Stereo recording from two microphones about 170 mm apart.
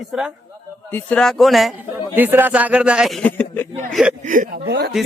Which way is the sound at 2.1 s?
10° right (ahead or behind).